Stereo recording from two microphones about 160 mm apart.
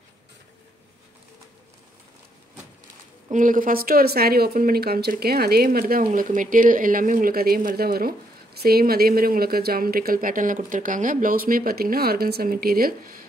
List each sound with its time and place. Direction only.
3.3 s speech: 55° right (ahead or behind)
6.1 s speech: 55° right (ahead or behind)